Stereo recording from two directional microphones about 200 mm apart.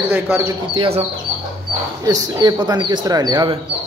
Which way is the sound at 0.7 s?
30° right (ahead or behind).